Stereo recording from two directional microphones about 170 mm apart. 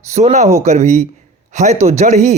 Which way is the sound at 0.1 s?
40° right (ahead or behind).